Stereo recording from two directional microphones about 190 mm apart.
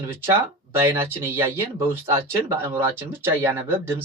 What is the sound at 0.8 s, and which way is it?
Speech, 15° right (ahead or behind).